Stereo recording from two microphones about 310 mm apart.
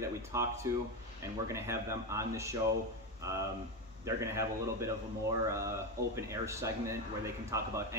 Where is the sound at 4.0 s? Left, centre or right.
Centre.